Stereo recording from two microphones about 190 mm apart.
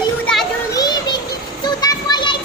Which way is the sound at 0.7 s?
20° left (ahead or behind).